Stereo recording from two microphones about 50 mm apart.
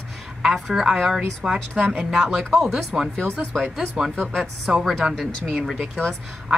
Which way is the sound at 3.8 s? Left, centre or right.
Centre.